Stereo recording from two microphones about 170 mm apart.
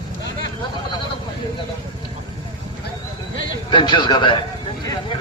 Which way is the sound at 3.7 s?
30° left (ahead or behind).